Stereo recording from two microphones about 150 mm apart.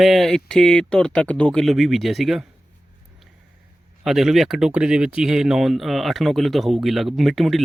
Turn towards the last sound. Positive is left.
turn(degrees=0)  # may be behind; listen again after turning